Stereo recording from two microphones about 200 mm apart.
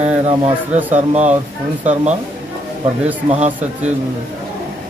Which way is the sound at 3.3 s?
35° right (ahead or behind).